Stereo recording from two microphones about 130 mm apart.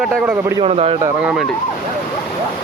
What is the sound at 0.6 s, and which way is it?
Speech, 55° right (ahead or behind).